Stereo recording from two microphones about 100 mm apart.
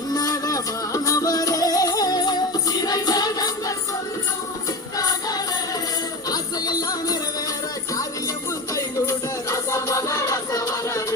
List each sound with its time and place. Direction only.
0.1 s music: 40° left (ahead or behind)
6.2 s music: 40° left (ahead or behind)
8.7 s music: 30° left (ahead or behind)